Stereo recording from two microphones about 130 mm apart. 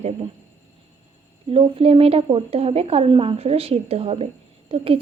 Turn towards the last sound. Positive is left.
turn(degrees=-45)  # may be behind; listen again after turning